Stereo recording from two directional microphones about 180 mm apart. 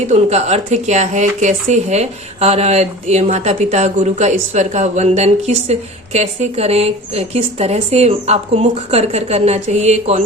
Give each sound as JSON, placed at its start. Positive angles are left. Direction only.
{"t": 0.1, "sound": "speech", "side_deg": -40}